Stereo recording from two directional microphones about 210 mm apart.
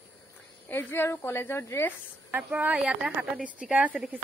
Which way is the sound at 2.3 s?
5° right (ahead or behind).